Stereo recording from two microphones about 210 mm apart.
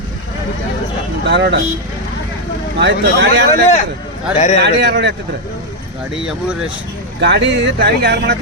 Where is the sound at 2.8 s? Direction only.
55° right (ahead or behind).